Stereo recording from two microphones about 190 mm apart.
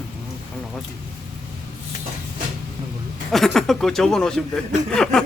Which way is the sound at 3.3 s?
Centre (ahead or behind).